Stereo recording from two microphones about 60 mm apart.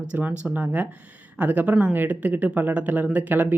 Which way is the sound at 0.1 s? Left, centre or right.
Right.